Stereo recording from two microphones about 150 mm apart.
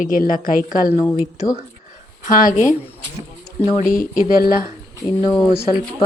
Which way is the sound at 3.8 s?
65° left (ahead or behind).